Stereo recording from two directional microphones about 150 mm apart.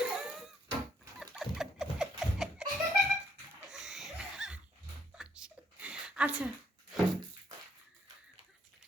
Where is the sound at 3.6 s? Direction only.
5° right (ahead or behind).